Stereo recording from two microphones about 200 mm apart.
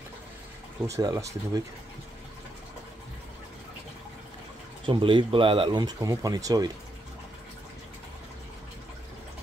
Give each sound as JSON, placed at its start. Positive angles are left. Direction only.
{"t": 0.8, "sound": "speech", "side_deg": -15}
{"t": 4.8, "sound": "speech", "side_deg": -25}